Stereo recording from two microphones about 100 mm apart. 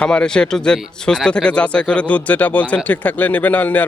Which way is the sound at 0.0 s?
10° left (ahead or behind).